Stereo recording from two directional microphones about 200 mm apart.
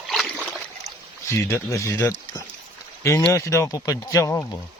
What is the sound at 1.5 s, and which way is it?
Speech, 15° left (ahead or behind).